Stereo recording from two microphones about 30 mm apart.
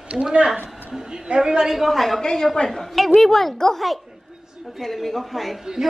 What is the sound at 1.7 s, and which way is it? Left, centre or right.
A woman's voice, centre.